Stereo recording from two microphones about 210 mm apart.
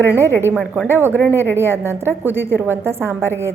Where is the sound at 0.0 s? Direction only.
10° right (ahead or behind).